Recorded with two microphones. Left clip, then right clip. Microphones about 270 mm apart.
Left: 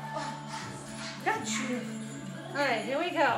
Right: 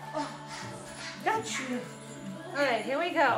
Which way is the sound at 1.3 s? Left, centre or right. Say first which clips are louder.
Right 2 dB; centre.